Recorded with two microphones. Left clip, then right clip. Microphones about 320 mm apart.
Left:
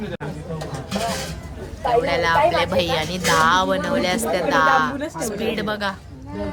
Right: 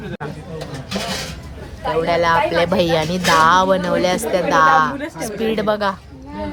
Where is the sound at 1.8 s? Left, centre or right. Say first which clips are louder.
Right 2 dB; centre.